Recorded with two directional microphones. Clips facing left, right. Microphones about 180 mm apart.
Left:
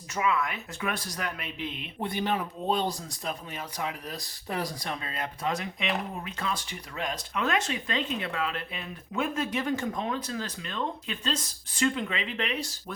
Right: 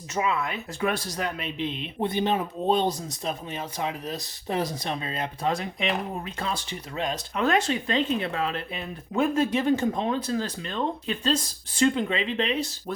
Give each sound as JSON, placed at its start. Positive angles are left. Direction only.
{"t": 0.1, "sound": "speech", "side_deg": -30}